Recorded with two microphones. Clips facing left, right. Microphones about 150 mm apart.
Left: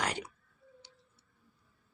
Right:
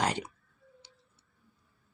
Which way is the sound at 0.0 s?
25° right (ahead or behind).